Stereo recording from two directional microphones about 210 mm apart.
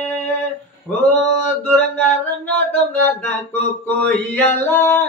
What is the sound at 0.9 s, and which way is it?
Speech, 5° left (ahead or behind).